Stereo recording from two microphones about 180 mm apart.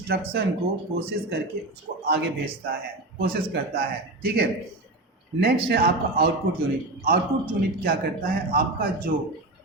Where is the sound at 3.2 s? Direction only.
55° right (ahead or behind).